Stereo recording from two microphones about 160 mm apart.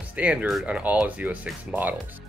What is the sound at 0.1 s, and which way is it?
Speech, 10° right (ahead or behind).